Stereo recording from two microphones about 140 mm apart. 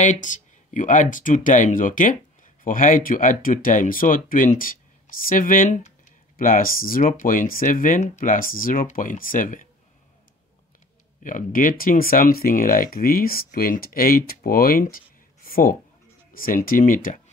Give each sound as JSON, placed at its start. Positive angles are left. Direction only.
{"t": 0.0, "sound": "speech", "side_deg": 65}
{"t": 6.3, "sound": "speech", "side_deg": 90}
{"t": 11.2, "sound": "speech", "side_deg": 70}